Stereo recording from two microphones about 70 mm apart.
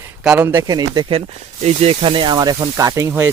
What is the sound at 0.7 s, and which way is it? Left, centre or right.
Speech, right.